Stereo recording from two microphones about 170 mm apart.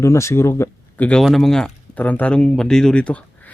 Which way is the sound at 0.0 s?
15° left (ahead or behind).